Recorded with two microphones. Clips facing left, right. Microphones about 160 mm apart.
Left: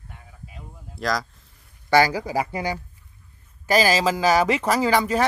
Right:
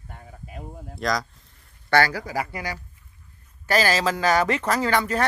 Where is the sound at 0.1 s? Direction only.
45° right (ahead or behind).